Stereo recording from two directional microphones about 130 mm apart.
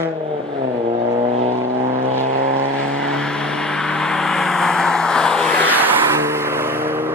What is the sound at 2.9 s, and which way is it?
Vehicle, 5° left (ahead or behind).